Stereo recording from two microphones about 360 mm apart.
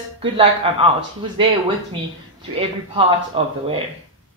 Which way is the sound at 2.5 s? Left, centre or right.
Centre.